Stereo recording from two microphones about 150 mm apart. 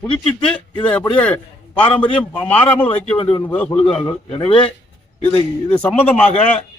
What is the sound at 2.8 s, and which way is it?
Speech, 40° left (ahead or behind).